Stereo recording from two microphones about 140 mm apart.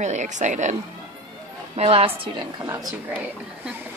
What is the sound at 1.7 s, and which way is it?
Speech, 45° right (ahead or behind).